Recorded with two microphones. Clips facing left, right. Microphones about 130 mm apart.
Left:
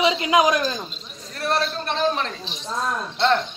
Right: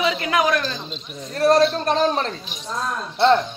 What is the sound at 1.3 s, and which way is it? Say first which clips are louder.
A man's voice: right 8 dB; 40° right (ahead or behind).